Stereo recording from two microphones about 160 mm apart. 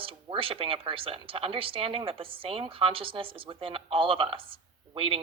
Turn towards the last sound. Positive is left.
turn(degrees=-35)  # may be behind; listen again after turning